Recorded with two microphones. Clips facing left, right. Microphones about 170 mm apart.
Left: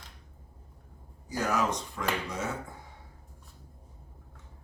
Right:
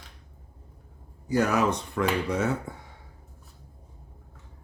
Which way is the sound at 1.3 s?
65° right (ahead or behind).